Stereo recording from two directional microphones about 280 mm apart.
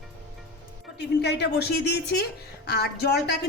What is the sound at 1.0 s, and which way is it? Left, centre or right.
A man's voice, left.